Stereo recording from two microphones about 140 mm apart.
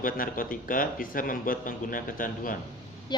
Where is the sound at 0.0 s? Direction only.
85° left.